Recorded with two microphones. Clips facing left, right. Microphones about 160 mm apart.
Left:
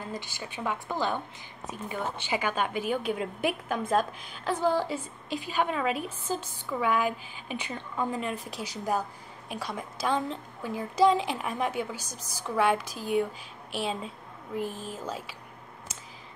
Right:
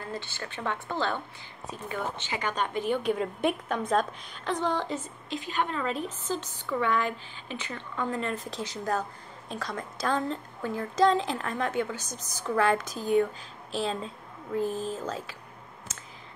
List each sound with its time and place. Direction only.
0.1 s a woman's voice: 15° left (ahead or behind)
14.6 s speech: 30° right (ahead or behind)
15.0 s a woman's voice: 10° left (ahead or behind)